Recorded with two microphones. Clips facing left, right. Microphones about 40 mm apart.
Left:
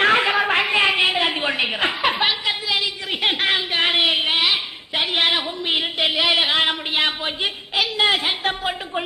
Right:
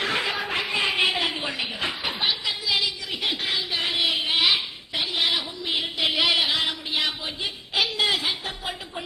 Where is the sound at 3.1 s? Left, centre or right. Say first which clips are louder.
Left 10 dB; left.